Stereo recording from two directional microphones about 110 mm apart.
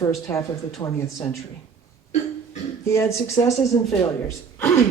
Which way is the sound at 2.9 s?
25° left (ahead or behind).